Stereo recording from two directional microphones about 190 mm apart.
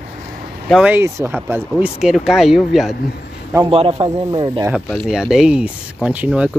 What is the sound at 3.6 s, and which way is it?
Speech, 30° right (ahead or behind).